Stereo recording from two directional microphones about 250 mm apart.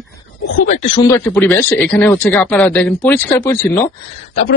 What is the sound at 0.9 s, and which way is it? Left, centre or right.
A man's voice, centre.